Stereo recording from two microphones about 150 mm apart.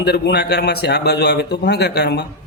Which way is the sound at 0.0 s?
90° left.